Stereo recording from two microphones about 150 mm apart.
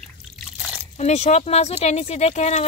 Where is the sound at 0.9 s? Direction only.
45° left (ahead or behind).